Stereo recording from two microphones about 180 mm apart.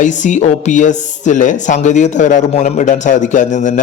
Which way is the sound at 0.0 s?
45° left (ahead or behind).